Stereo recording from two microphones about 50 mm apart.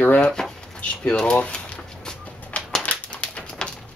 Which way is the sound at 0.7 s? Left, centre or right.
Centre.